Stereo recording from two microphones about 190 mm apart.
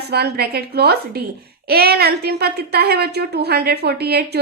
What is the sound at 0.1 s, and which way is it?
A woman's voice, 60° right (ahead or behind).